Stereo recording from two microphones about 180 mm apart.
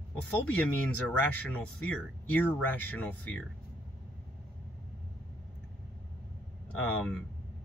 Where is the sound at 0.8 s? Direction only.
10° left (ahead or behind).